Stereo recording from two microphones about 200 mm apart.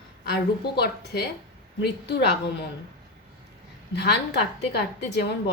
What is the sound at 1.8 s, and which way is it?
Speech, 55° left (ahead or behind).